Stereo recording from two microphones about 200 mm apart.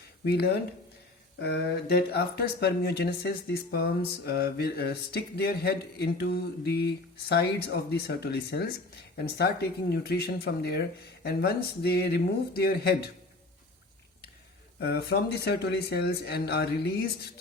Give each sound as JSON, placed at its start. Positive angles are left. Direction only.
{"t": 0.3, "sound": "speech", "side_deg": 55}
{"t": 14.8, "sound": "speech", "side_deg": 55}